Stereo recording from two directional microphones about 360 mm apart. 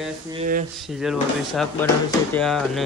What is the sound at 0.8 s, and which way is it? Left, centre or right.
Speech, centre.